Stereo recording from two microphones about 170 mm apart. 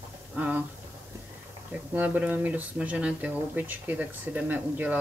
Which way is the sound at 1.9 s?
10° right (ahead or behind).